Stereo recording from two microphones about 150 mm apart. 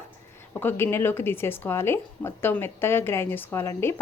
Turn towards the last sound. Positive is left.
turn(degrees=15)  # may be behind; listen again after turning